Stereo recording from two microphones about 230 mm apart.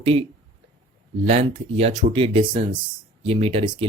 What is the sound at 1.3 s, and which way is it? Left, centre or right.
Speech, right.